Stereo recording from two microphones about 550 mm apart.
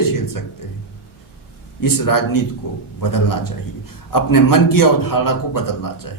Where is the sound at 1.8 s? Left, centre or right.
Left.